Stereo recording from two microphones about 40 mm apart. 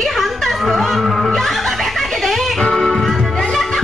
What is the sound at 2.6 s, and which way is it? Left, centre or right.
Music, centre.